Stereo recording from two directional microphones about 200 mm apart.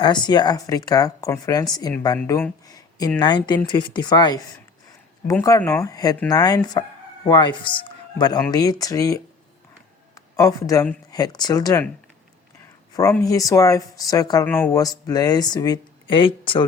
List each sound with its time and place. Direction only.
0.0 s speech: 20° left (ahead or behind)
10.3 s speech: 15° left (ahead or behind)
13.2 s speech: 15° left (ahead or behind)